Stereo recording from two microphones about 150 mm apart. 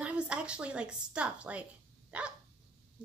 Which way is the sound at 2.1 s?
10° right (ahead or behind).